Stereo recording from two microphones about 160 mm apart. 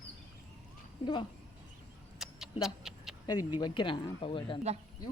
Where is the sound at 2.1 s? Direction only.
Centre (ahead or behind).